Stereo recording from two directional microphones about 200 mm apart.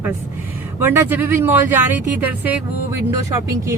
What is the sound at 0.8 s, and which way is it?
Speech, 10° right (ahead or behind).